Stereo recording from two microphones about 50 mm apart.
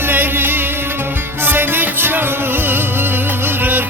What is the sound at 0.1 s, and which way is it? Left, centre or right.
Music, right.